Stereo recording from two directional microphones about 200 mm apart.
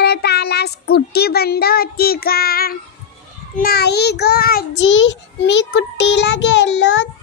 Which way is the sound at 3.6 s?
50° left (ahead or behind).